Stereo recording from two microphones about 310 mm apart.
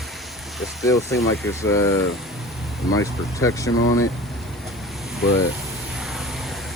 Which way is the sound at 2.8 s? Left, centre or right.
Centre.